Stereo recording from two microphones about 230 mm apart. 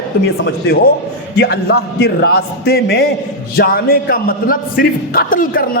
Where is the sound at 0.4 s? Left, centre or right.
Left.